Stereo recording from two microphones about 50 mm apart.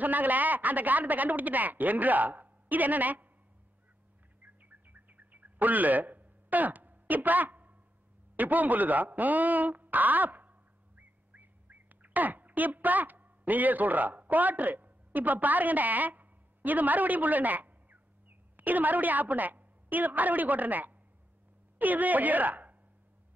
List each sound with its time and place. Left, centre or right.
0.0 s a woman's voice: right
4.4 s bird: right
8.4 s a woman's voice: right
11.0 s bird: right
18.6 s a woman's voice: right